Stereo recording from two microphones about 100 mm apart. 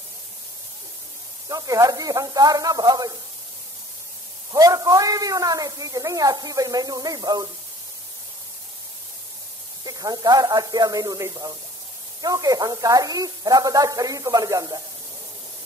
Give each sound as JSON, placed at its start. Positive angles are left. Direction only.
{"t": 1.5, "sound": "a woman's voice", "side_deg": -35}
{"t": 4.5, "sound": "a woman's voice", "side_deg": -40}
{"t": 9.8, "sound": "a woman's voice", "side_deg": -40}